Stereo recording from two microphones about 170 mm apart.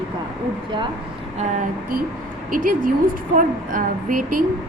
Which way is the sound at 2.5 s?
55° right (ahead or behind).